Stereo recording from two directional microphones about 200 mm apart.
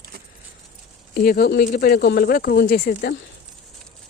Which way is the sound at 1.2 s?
50° left (ahead or behind).